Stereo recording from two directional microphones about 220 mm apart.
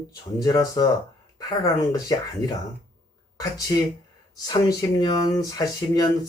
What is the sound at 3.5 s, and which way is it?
Speech, 15° left (ahead or behind).